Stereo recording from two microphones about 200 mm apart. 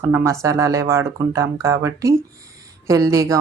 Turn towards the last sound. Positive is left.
turn(degrees=-15)  # may be behind; listen again after turning